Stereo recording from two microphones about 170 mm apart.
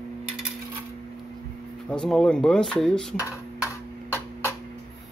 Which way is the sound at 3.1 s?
15° left (ahead or behind).